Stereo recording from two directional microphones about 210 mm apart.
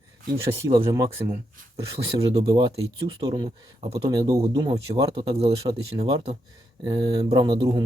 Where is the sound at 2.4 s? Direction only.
20° right (ahead or behind).